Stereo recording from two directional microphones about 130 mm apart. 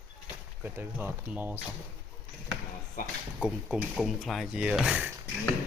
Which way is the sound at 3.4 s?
5° right (ahead or behind).